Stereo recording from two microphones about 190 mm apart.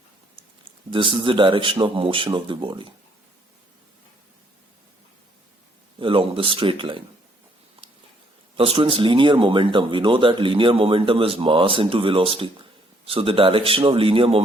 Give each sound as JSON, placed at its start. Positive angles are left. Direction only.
{"t": 0.9, "sound": "speech", "side_deg": -25}
{"t": 6.0, "sound": "speech", "side_deg": -30}
{"t": 8.5, "sound": "speech", "side_deg": -30}